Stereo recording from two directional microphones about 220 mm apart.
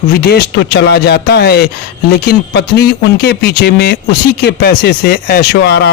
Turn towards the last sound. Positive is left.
turn(degrees=50)  # may be behind; listen again after turning